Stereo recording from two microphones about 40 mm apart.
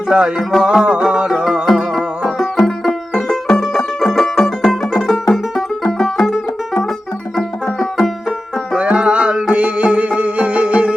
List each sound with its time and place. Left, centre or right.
0.1 s music: right
1.6 s music: centre
2.2 s music: centre
7.3 s music: centre
8.7 s music: right